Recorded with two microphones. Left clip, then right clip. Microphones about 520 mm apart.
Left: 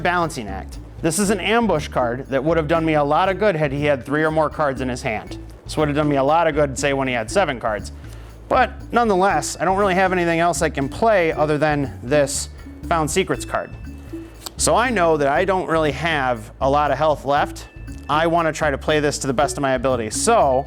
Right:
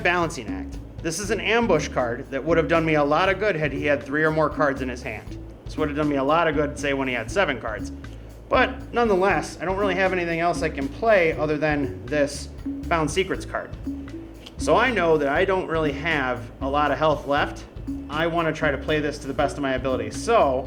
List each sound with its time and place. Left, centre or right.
0.0 s a man's voice: left
18.1 s a man's voice: left